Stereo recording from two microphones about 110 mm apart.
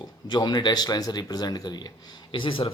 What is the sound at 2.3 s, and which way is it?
Speech, 50° left (ahead or behind).